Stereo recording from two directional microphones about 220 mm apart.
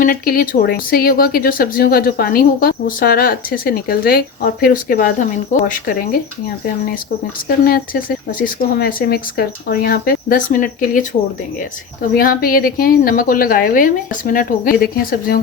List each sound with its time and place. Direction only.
0.0 s speech: 40° left (ahead or behind)
7.4 s speech: 40° left (ahead or behind)
12.1 s speech: 40° left (ahead or behind)